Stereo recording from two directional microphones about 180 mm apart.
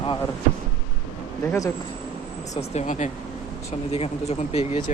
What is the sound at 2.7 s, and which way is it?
Speech, 40° left (ahead or behind).